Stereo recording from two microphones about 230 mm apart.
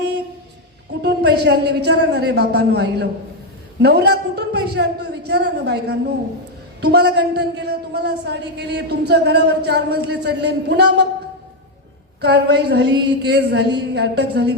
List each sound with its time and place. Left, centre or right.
1.0 s a man's voice: right
12.2 s a man's voice: right